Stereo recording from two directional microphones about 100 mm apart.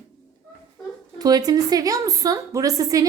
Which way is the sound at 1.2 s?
40° right (ahead or behind).